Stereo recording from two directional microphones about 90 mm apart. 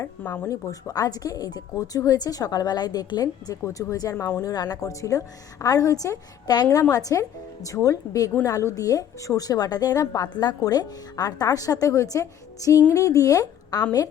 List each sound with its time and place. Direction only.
0.2 s speech: 20° left (ahead or behind)
0.5 s a woman's voice: 45° left (ahead or behind)
4.1 s a woman's voice: 30° left (ahead or behind)
4.5 s a woman's voice: 45° left (ahead or behind)